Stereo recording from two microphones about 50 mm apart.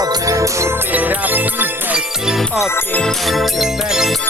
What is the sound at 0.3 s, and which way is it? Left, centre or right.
Music, right.